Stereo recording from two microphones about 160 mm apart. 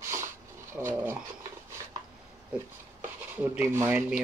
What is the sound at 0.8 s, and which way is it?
Speech, 15° right (ahead or behind).